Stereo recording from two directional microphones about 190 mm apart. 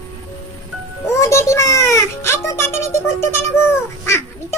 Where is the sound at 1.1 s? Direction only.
15° left (ahead or behind).